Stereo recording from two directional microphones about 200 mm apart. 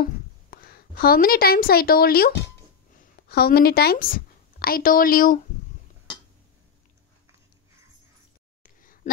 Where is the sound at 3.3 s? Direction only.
50° left (ahead or behind).